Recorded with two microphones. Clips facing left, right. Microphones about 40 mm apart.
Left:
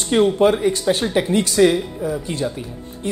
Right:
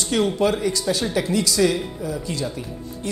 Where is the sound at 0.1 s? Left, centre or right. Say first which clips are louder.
Left 5 dB; left.